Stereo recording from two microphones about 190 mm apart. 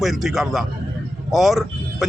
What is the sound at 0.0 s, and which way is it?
Speech, centre (ahead or behind).